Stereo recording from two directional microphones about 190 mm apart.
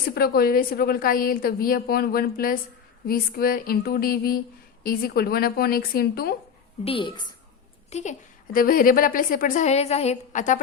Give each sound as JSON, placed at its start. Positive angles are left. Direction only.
{"t": 0.1, "sound": "a woman's voice", "side_deg": 55}
{"t": 6.8, "sound": "a woman's voice", "side_deg": 25}
{"t": 8.5, "sound": "a woman's voice", "side_deg": 45}